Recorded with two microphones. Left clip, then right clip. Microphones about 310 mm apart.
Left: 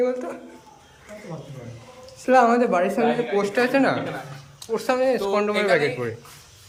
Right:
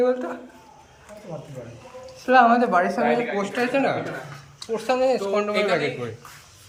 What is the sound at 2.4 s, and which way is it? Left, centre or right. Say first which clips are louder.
Speech: right 3 dB; centre.